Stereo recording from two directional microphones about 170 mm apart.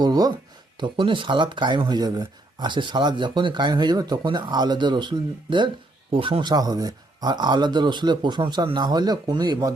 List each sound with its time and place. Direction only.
0.0 s speech: 25° right (ahead or behind)